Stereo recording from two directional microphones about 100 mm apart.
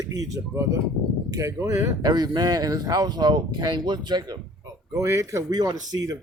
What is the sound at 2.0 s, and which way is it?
Speech, 45° right (ahead or behind).